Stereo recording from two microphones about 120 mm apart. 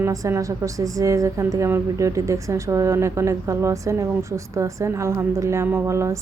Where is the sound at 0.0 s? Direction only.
25° right (ahead or behind).